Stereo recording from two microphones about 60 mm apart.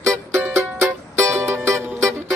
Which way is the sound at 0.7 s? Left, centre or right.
Right.